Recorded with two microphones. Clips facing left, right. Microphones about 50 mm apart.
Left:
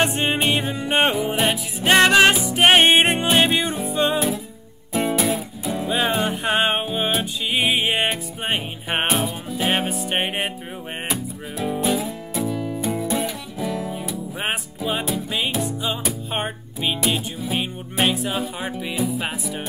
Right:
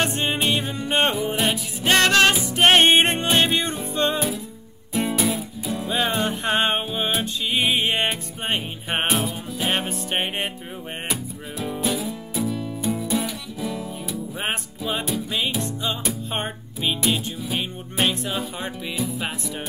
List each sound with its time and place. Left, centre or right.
0.0 s music: centre